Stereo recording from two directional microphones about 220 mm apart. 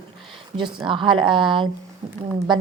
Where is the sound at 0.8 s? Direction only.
20° right (ahead or behind).